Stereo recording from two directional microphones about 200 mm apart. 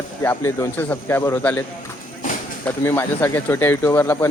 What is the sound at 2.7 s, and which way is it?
Speech, 10° left (ahead or behind).